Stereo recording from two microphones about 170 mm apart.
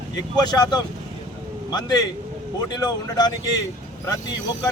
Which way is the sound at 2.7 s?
25° left (ahead or behind).